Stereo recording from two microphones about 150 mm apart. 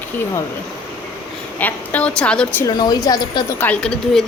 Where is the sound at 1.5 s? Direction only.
10° left (ahead or behind).